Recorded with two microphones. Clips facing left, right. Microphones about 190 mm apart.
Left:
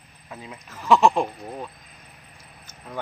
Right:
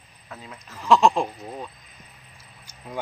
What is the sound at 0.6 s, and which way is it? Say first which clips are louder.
Speech: even; centre (ahead or behind).